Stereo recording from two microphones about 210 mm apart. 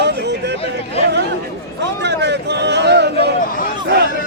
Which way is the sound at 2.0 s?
55° right (ahead or behind).